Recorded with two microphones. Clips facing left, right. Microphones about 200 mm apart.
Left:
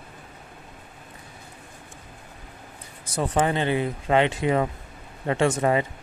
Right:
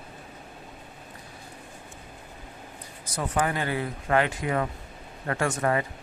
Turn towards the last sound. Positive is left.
turn(degrees=20)  # may be behind; listen again after turning